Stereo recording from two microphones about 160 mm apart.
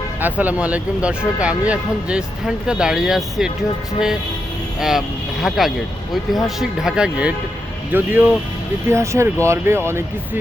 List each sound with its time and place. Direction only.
0.2 s speech: 10° right (ahead or behind)
4.8 s speech: centre (ahead or behind)